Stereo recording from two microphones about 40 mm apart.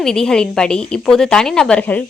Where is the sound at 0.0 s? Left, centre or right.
Centre.